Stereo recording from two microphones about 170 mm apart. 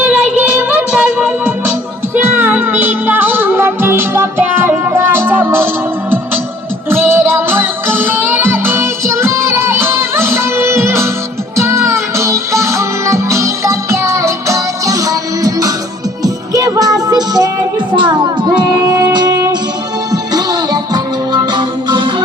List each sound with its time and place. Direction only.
0.7 s music: 10° right (ahead or behind)
6.9 s music: 15° right (ahead or behind)
17.9 s child singing: 30° right (ahead or behind)
20.3 s music: 25° right (ahead or behind)